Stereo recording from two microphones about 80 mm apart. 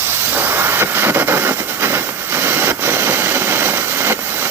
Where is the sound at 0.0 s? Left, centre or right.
Right.